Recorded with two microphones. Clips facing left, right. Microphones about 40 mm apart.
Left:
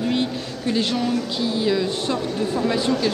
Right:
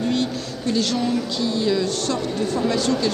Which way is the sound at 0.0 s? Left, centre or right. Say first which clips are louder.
Even; left.